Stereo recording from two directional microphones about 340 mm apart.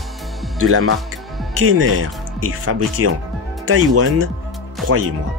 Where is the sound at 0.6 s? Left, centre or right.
Right.